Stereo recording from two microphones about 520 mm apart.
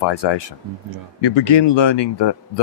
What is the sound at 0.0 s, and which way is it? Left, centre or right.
Speech, left.